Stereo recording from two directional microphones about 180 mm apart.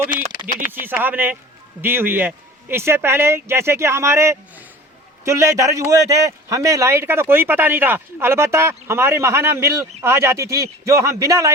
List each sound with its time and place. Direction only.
0.7 s a man's voice: 10° right (ahead or behind)